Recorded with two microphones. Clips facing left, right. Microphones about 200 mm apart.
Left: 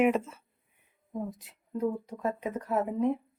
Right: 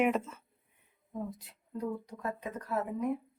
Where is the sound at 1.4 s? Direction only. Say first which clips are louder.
Left 7 dB; 20° left (ahead or behind).